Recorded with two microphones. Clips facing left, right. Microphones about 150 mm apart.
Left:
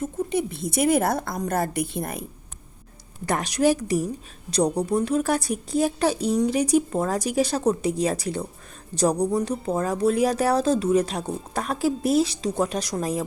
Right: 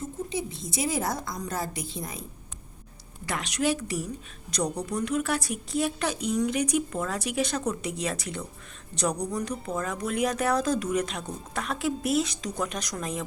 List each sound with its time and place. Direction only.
0.0 s a woman's voice: 60° left (ahead or behind)
3.2 s speech: 40° left (ahead or behind)